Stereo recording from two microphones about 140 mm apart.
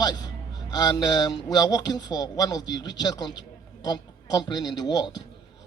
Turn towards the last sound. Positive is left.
turn(degrees=30)  # may be behind; listen again after turning